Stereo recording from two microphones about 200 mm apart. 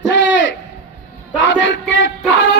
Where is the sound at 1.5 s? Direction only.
70° left (ahead or behind).